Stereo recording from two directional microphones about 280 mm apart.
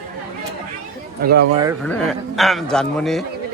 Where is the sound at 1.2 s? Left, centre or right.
Right.